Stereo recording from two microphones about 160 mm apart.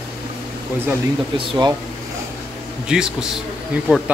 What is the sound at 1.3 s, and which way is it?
Speech, 30° right (ahead or behind).